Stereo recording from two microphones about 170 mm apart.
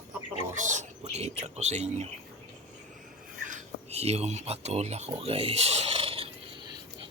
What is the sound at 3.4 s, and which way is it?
Speech, 40° right (ahead or behind).